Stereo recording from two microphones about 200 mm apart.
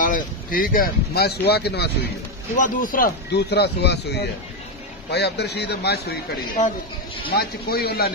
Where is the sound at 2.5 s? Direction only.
40° left (ahead or behind).